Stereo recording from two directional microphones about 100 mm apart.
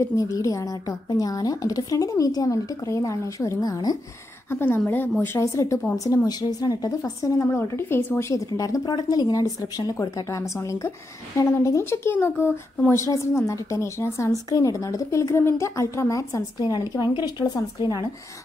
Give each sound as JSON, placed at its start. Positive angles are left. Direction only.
{"t": 0.0, "sound": "speech", "side_deg": 30}
{"t": 4.5, "sound": "a woman's voice", "side_deg": 25}
{"t": 5.4, "sound": "speech", "side_deg": 35}